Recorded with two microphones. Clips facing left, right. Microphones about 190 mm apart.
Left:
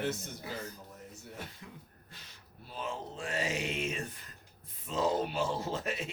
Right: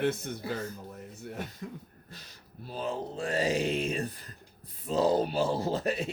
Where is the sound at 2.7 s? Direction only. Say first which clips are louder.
Right 6 dB; 35° right (ahead or behind).